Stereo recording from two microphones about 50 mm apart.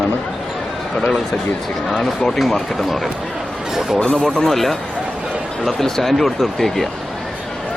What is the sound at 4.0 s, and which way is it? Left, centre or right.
Speech, centre.